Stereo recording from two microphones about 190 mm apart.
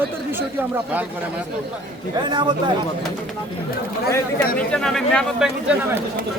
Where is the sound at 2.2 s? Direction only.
25° right (ahead or behind).